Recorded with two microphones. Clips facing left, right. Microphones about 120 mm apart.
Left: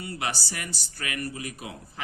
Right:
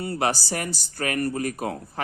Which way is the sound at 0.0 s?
40° right (ahead or behind).